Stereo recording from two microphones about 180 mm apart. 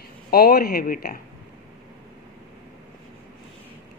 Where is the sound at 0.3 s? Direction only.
60° left (ahead or behind).